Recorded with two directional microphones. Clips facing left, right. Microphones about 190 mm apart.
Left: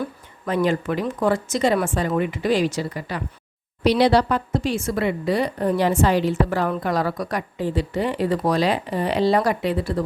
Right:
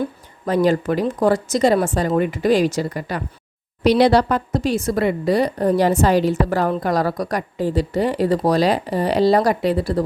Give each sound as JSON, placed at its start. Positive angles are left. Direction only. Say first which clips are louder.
{"t": 0.4, "sound": "a woman's voice", "louder": "right 4 dB", "side_deg": -35}